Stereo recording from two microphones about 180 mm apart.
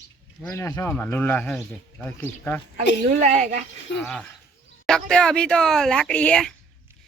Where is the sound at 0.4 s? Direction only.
15° left (ahead or behind).